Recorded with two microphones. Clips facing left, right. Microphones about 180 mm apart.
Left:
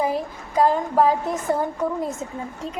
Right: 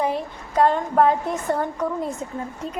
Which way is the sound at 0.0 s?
5° left (ahead or behind).